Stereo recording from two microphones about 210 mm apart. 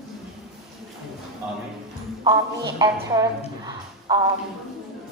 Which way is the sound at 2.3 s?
20° right (ahead or behind).